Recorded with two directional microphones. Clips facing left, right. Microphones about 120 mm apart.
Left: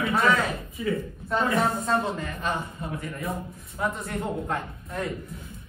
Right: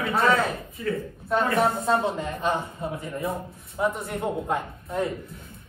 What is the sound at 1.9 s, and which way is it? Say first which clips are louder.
A man's voice: right 2 dB; 25° right (ahead or behind).